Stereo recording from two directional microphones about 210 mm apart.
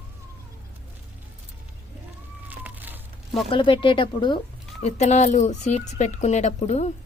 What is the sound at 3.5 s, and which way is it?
Speech, 25° left (ahead or behind).